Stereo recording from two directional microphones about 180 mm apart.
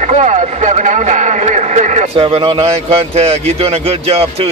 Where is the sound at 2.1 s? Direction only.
30° right (ahead or behind).